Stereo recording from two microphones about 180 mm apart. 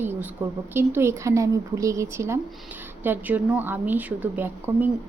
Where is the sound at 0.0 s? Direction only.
10° right (ahead or behind).